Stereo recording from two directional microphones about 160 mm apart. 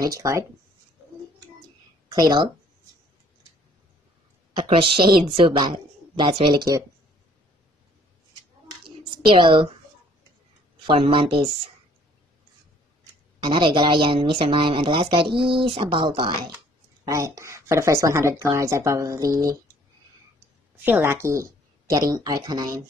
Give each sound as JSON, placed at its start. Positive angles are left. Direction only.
{"t": 0.0, "sound": "speech", "side_deg": -20}
{"t": 2.0, "sound": "speech", "side_deg": -25}
{"t": 4.6, "sound": "speech", "side_deg": -35}
{"t": 8.6, "sound": "a sound", "side_deg": -30}
{"t": 10.9, "sound": "speech", "side_deg": -35}
{"t": 13.4, "sound": "speech", "side_deg": -30}
{"t": 17.0, "sound": "speech", "side_deg": -20}
{"t": 20.8, "sound": "speech", "side_deg": -15}